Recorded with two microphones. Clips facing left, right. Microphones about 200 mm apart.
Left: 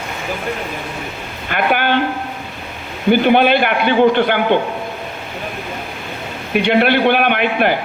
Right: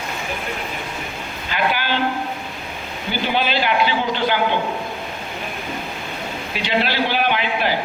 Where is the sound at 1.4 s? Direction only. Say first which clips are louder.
Left 5 dB; 55° left (ahead or behind).